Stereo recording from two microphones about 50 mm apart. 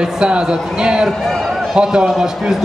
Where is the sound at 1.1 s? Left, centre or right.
Centre.